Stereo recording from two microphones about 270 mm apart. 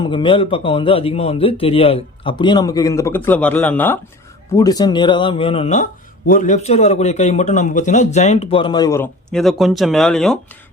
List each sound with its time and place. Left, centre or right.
0.0 s speech: centre